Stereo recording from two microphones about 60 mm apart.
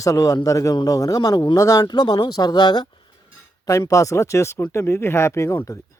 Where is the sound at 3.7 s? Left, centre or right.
Left.